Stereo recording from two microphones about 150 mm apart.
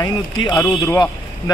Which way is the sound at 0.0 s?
25° left (ahead or behind).